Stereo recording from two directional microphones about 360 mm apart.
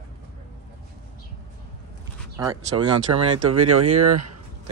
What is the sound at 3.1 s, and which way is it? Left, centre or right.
Speech, right.